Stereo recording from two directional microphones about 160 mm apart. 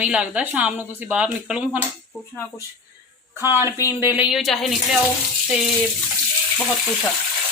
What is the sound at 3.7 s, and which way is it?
Speech, 20° left (ahead or behind).